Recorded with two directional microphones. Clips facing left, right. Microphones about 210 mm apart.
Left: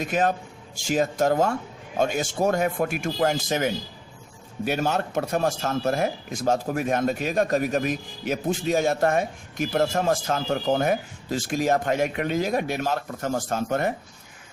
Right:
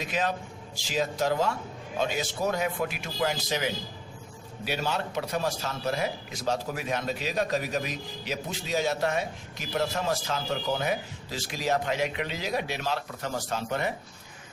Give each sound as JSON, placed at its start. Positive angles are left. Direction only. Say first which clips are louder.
{"t": 0.0, "sound": "speech", "louder": "left 6 dB", "side_deg": 50}